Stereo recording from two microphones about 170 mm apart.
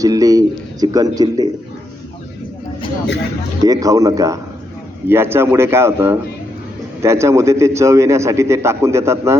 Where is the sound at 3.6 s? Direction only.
20° right (ahead or behind).